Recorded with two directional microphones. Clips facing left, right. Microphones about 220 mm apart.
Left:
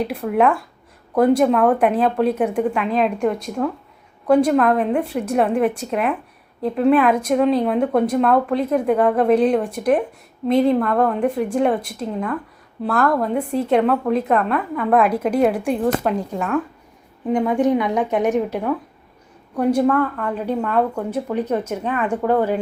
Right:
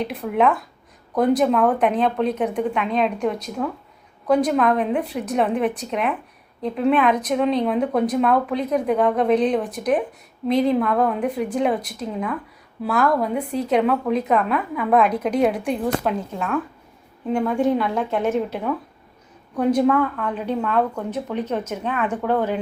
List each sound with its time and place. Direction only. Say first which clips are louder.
0.0 s a woman's voice: left 2 dB; centre (ahead or behind)
17.5 s a woman's voice: left 3 dB; 15° left (ahead or behind)
19.9 s a woman's voice: left 1 dB; centre (ahead or behind)
21.7 s a woman's voice: left 2 dB; centre (ahead or behind)